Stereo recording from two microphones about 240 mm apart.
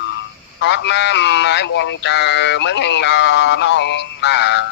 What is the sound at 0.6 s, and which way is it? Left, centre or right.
Speech, left.